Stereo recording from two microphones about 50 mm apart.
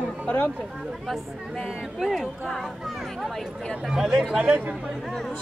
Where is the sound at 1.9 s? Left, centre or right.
Centre.